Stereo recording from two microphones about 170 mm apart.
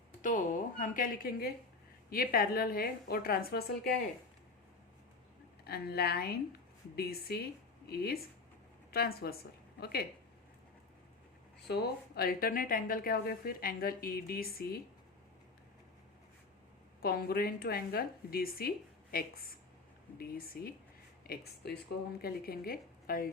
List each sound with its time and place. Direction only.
0.2 s a sound: 50° left (ahead or behind)
2.0 s a woman's voice: 60° left (ahead or behind)
5.6 s a woman's voice: 65° left (ahead or behind)
11.7 s a woman's voice: 65° left (ahead or behind)
17.0 s a woman's voice: 65° left (ahead or behind)
21.2 s a woman's voice: 75° left (ahead or behind)